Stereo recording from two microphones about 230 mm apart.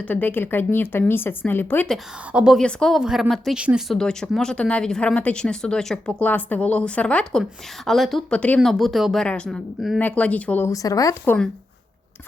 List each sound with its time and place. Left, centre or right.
0.0 s a woman's voice: centre